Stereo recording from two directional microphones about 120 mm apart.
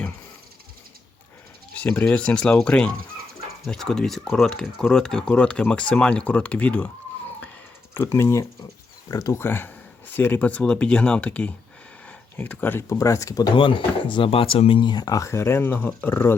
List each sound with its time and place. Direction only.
1.7 s speech: 10° left (ahead or behind)
7.9 s speech: 20° left (ahead or behind)
13.0 s speech: 25° left (ahead or behind)
13.6 s speech: 45° left (ahead or behind); by 16.3 s 15° left (ahead or behind)